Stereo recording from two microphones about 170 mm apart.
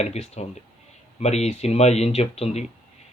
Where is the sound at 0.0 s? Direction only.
40° left (ahead or behind).